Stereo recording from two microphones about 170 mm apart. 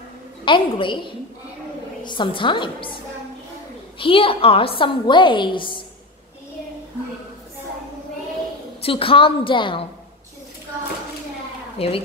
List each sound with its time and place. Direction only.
0.5 s a woman's voice: 30° left (ahead or behind)
4.0 s a woman's voice: 30° left (ahead or behind)
8.8 s a woman's voice: 30° left (ahead or behind)
11.8 s a woman's voice: 35° left (ahead or behind)